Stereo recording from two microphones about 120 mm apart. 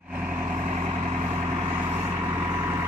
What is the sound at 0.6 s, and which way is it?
Vehicle, 60° right (ahead or behind).